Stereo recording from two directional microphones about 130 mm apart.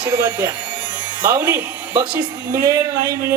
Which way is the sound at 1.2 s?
10° right (ahead or behind).